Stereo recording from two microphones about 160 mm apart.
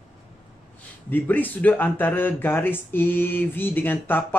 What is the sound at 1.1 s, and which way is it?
Speech, 10° left (ahead or behind).